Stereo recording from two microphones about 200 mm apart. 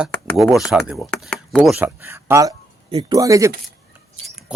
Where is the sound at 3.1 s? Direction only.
15° right (ahead or behind).